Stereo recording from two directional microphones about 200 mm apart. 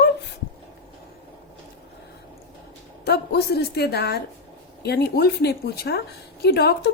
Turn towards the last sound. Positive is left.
turn(degrees=55)  # may be behind; listen again after turning